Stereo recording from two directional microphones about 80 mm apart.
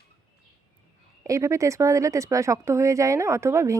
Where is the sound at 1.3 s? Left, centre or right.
Right.